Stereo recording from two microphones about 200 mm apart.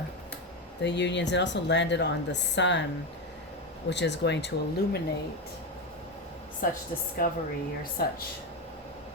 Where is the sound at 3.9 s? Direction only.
60° left (ahead or behind).